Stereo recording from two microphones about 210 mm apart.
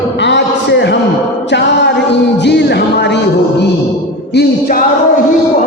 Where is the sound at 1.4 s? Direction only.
55° left (ahead or behind).